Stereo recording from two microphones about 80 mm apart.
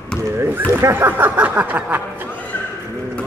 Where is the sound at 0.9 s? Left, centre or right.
Right.